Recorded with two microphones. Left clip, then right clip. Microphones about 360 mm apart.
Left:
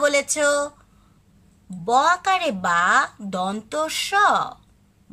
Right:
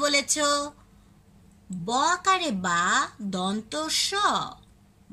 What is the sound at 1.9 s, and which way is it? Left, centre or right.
A woman's voice, left.